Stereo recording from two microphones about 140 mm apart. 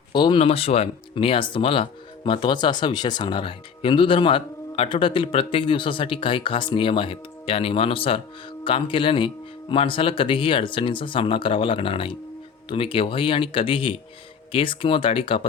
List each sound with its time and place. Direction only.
0.1 s speech: 35° left (ahead or behind)